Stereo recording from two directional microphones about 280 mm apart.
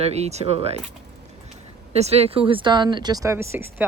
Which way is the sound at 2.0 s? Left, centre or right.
Right.